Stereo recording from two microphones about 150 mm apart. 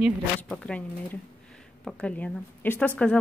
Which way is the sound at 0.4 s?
10° left (ahead or behind).